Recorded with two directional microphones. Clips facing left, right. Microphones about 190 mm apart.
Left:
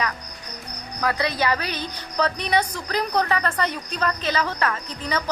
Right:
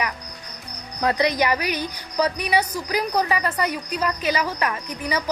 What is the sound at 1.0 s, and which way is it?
A woman's voice, 15° right (ahead or behind).